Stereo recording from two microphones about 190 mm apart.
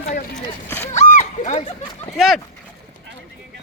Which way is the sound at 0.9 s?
40° left (ahead or behind).